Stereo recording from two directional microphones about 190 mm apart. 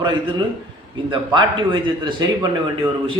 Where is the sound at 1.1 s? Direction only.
25° right (ahead or behind).